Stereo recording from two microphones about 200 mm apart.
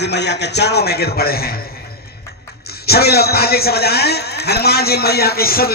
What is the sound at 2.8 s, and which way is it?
A man's voice, 50° left (ahead or behind).